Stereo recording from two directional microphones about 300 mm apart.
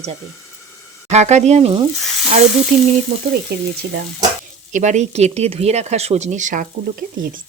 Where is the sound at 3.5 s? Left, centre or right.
Right.